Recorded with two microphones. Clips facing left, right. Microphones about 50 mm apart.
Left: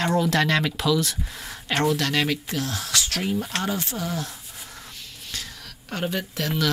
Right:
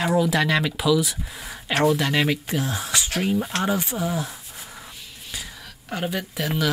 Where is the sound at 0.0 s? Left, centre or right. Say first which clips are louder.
Right 1 dB; centre.